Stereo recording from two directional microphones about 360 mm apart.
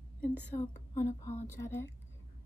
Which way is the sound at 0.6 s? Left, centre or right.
Centre.